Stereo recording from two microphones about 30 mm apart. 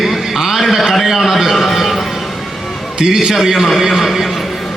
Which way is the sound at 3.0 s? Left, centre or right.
Right.